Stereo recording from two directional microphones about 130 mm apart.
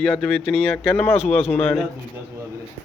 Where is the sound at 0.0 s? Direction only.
10° left (ahead or behind).